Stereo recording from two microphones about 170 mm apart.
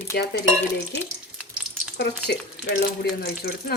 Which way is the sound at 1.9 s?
70° left (ahead or behind).